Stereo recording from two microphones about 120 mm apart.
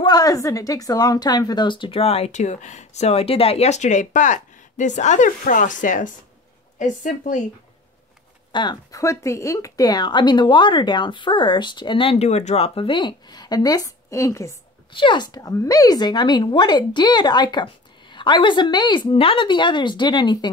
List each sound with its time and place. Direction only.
0.0 s a woman's voice: 35° left (ahead or behind); by 7.4 s 90° left
8.5 s speech: 40° left (ahead or behind)
8.9 s speech: 25° left (ahead or behind)
14.9 s speech: 45° left (ahead or behind)